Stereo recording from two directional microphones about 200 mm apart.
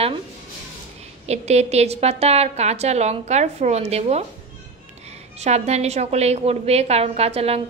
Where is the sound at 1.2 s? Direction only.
35° right (ahead or behind).